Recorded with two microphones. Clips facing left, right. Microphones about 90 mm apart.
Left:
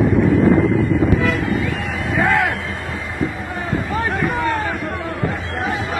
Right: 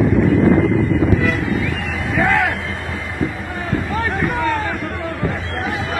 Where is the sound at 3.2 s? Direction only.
30° left (ahead or behind).